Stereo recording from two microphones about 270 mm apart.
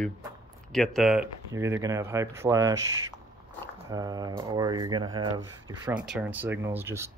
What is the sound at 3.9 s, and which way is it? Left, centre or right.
Speech, centre.